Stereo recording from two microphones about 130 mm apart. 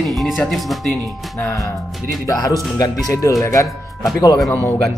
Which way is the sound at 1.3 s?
20° left (ahead or behind).